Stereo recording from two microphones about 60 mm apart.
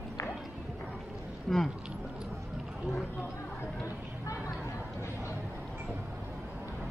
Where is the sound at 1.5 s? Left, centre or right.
Centre.